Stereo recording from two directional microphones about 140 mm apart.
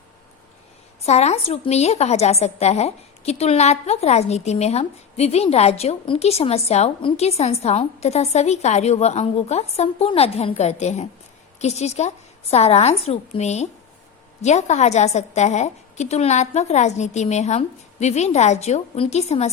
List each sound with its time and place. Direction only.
1.0 s a woman's voice: 50° left (ahead or behind)